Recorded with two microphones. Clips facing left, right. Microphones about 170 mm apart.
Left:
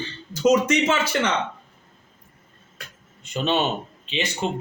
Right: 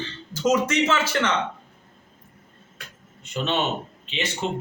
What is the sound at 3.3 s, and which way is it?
Speech, 15° left (ahead or behind).